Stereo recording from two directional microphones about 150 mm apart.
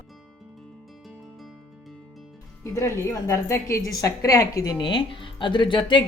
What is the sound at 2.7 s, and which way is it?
A woman's voice, 20° left (ahead or behind).